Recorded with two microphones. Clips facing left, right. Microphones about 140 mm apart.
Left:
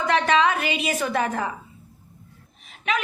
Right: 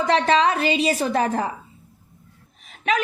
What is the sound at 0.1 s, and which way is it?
A woman's voice, 35° right (ahead or behind).